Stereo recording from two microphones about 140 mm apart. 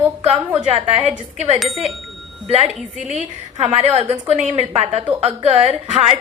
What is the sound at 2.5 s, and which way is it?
A woman's voice, 50° right (ahead or behind).